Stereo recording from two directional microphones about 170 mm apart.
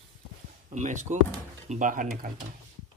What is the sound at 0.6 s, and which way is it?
Speech, 45° right (ahead or behind).